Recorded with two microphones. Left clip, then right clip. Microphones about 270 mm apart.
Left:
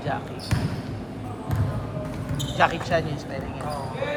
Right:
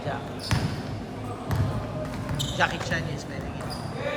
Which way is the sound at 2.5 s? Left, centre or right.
Left.